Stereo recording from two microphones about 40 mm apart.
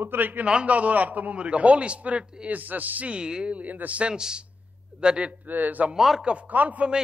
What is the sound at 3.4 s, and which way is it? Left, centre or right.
Speech, right.